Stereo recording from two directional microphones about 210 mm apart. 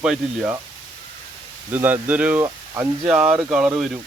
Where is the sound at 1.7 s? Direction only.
10° right (ahead or behind).